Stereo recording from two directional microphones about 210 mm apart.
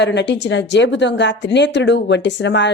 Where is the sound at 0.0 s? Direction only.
55° left (ahead or behind).